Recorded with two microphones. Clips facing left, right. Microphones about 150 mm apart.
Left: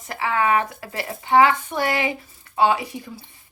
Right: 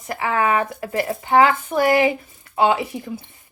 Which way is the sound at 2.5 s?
25° right (ahead or behind).